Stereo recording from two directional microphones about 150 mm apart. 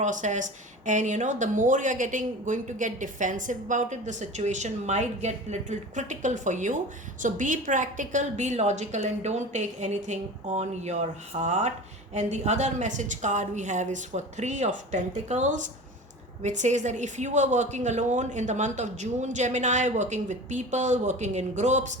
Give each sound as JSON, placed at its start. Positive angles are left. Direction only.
{"t": 0.0, "sound": "speech", "side_deg": -55}